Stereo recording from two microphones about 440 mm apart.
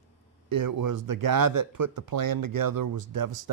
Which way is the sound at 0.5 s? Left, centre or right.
Right.